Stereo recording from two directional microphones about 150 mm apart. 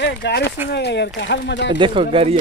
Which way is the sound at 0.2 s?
90° left.